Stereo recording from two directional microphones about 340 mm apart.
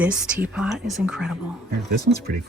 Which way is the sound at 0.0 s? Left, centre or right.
Centre.